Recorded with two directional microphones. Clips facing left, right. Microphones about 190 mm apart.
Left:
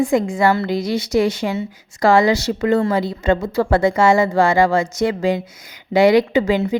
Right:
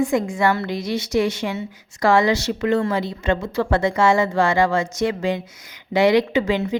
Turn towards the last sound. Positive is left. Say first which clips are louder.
# left 3 dB
turn(degrees=35)  # may be behind; listen again after turning